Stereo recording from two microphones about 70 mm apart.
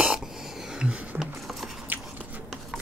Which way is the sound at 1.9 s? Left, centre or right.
Right.